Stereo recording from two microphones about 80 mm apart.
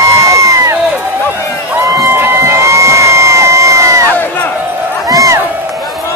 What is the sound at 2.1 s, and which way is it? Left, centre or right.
Crowd, right.